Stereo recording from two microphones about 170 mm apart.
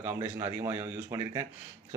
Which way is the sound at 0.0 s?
10° right (ahead or behind).